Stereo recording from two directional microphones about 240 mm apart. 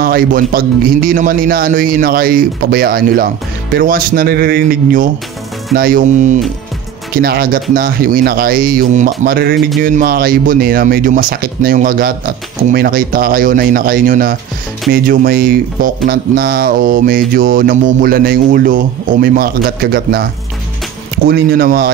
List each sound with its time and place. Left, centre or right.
0.0 s speech: right
21.3 s speech: right